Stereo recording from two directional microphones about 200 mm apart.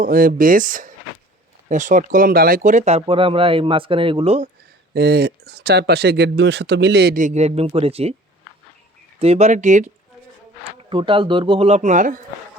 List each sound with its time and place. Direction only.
0.0 s speech: 45° right (ahead or behind); by 4.4 s 30° right (ahead or behind)
4.9 s speech: 50° right (ahead or behind); by 8.1 s 30° right (ahead or behind)
9.1 s speech: 30° right (ahead or behind)
10.6 s speech: 25° right (ahead or behind)